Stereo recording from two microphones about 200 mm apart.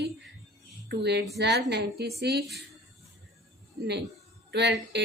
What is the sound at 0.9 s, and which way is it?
Female singing, 55° right (ahead or behind).